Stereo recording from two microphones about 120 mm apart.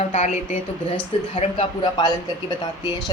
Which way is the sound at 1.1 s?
50° left (ahead or behind).